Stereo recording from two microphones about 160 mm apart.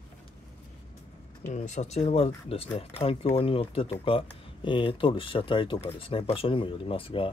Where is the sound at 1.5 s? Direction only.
50° left (ahead or behind).